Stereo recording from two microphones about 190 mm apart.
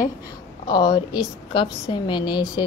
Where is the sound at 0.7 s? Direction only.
25° left (ahead or behind).